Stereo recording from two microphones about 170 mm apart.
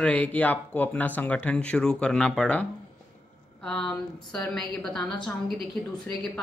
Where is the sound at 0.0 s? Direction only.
10° left (ahead or behind).